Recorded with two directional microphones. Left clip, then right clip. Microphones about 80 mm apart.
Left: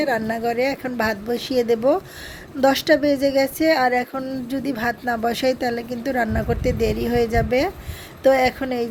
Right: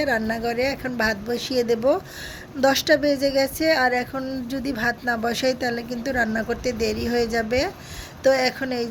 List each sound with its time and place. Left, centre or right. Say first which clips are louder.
0.0 s a woman's voice: left 2 dB; left
4.1 s speech: left 1 dB; centre
4.4 s speech: left 1 dB; left